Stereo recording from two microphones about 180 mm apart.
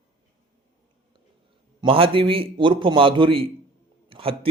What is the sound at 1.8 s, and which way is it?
A man's voice, 30° right (ahead or behind).